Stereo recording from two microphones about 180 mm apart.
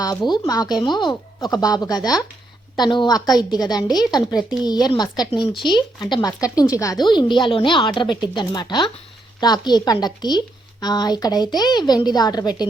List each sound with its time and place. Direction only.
0.3 s speech: 20° left (ahead or behind)